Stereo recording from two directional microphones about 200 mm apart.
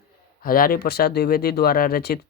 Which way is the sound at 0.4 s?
45° left (ahead or behind).